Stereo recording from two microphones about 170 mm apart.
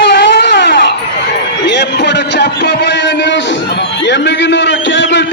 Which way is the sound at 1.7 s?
90° left.